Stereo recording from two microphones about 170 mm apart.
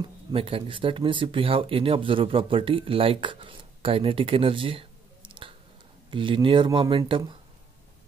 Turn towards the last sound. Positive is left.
turn(degrees=-30)  # may be behind; listen again after turning